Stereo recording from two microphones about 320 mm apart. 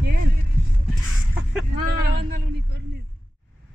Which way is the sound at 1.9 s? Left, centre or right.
Right.